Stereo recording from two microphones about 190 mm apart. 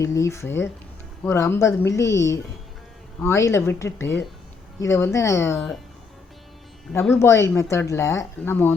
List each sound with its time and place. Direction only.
0.0 s speech: 15° left (ahead or behind)
7.2 s speech: 15° left (ahead or behind)